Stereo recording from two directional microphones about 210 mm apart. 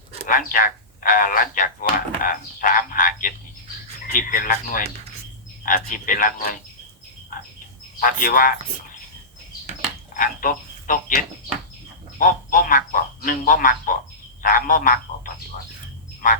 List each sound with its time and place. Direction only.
0.3 s speech: 40° left (ahead or behind)
7.9 s speech: 40° left (ahead or behind)
10.2 s speech: 40° left (ahead or behind)